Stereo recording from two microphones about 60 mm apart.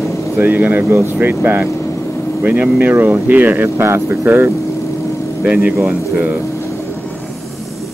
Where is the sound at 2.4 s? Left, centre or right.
Right.